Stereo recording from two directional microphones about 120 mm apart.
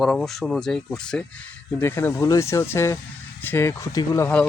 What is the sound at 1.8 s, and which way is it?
Speech, 20° left (ahead or behind).